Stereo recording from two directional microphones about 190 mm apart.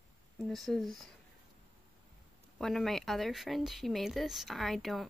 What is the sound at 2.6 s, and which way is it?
Speech, centre (ahead or behind).